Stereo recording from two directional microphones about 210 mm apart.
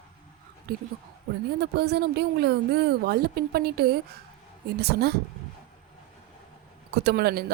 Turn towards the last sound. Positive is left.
turn(degrees=-50)  # may be behind; listen again after turning